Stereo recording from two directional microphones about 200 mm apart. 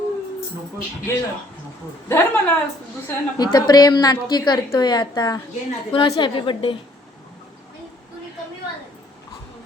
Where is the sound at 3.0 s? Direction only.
20° left (ahead or behind).